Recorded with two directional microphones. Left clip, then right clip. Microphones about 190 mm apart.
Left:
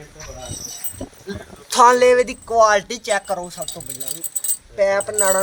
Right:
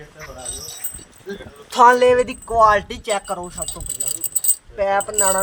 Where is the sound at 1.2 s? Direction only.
Centre (ahead or behind).